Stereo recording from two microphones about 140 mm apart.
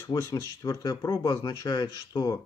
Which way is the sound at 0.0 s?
25° left (ahead or behind).